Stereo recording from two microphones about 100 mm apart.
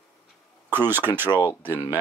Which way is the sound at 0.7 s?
20° right (ahead or behind).